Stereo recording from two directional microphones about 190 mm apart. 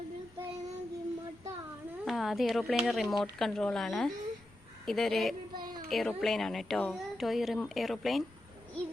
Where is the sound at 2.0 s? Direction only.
Centre (ahead or behind).